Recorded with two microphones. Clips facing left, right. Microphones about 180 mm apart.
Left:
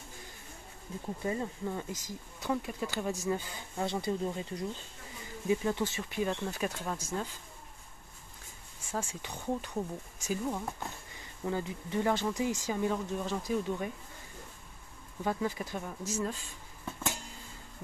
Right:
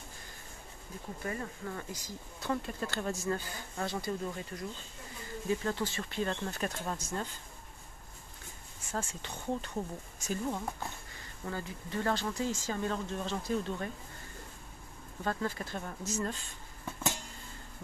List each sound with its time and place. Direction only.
1.2 s speech: 20° left (ahead or behind)
8.9 s speech: 10° left (ahead or behind)
11.4 s speech: 20° left (ahead or behind)
15.2 s speech: 15° left (ahead or behind)